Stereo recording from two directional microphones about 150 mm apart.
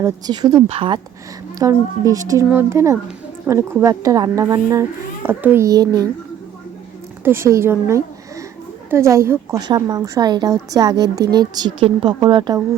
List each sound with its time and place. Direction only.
0.0 s a woman's voice: 25° right (ahead or behind)
1.5 s a woman's voice: 20° right (ahead or behind)
7.3 s a woman's voice: 15° right (ahead or behind)